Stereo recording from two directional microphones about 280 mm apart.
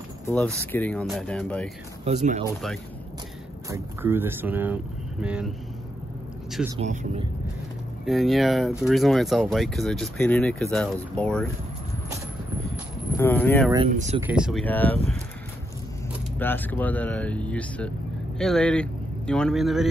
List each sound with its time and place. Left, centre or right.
0.3 s speech: centre
2.0 s speech: right
3.7 s speech: centre
6.8 s speech: right
8.0 s speech: centre
13.2 s speech: centre
13.8 s speech: right
14.2 s speech: centre
16.3 s speech: centre